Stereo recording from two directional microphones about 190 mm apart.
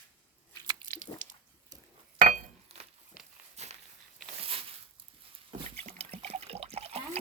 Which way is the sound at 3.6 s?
35° right (ahead or behind).